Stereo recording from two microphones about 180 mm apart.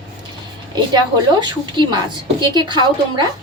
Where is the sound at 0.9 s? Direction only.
25° right (ahead or behind).